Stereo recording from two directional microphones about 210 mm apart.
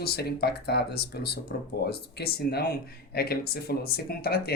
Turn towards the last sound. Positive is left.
turn(degrees=45)  # may be behind; listen again after turning